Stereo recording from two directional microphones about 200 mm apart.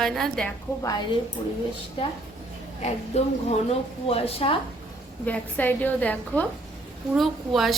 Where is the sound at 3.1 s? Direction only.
35° left (ahead or behind).